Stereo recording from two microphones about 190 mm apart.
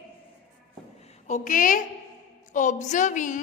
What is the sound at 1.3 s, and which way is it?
A woman's voice, 40° left (ahead or behind).